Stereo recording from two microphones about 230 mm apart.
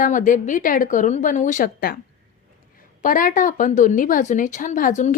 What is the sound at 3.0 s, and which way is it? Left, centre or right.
A woman's voice, left.